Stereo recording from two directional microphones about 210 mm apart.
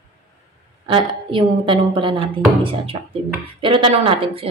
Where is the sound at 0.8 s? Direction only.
25° right (ahead or behind).